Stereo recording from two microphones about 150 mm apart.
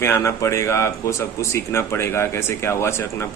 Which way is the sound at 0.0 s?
15° left (ahead or behind).